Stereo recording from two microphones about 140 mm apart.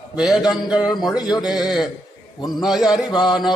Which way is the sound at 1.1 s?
30° left (ahead or behind).